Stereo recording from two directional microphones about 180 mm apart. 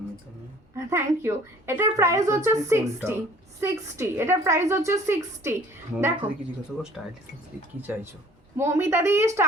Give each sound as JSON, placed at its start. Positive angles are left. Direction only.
{"t": 0.8, "sound": "a woman's voice", "side_deg": -15}
{"t": 7.0, "sound": "speech", "side_deg": 5}
{"t": 7.8, "sound": "a woman's voice", "side_deg": -10}